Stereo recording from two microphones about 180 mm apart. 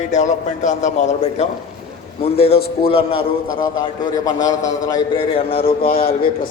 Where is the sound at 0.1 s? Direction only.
40° left (ahead or behind); by 4.9 s 20° left (ahead or behind).